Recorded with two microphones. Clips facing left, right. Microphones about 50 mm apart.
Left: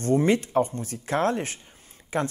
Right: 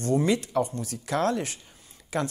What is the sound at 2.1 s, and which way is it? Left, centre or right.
Speech, left.